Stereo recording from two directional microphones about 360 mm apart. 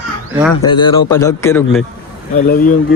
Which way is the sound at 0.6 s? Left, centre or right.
Centre.